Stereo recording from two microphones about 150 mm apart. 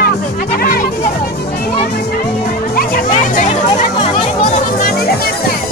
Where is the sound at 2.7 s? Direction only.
65° left (ahead or behind).